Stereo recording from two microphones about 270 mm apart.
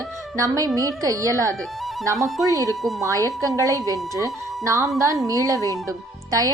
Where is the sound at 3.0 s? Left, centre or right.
Centre.